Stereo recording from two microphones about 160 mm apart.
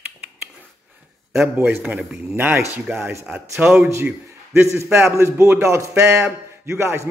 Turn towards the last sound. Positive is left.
turn(degrees=-15)  # may be behind; listen again after turning